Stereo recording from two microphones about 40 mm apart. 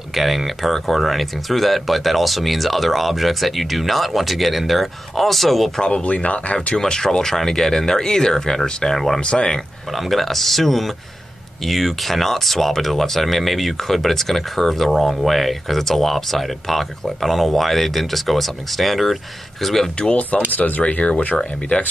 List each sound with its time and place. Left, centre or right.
0.1 s speech: centre
6.0 s speech: left
6.8 s speech: centre
9.2 s speech: left
9.9 s speech: centre
20.2 s speech: left